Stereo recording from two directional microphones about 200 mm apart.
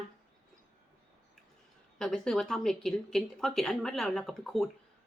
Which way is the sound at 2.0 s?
Centre (ahead or behind).